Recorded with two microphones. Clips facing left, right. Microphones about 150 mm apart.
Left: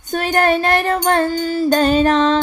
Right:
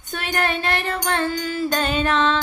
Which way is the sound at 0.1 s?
40° left (ahead or behind).